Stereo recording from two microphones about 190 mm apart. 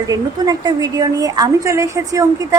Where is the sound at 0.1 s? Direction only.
20° right (ahead or behind).